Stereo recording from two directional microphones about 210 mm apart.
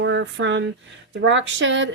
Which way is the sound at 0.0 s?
60° right (ahead or behind).